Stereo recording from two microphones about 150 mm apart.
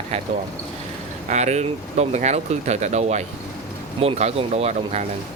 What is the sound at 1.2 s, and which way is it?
Speech, 50° right (ahead or behind).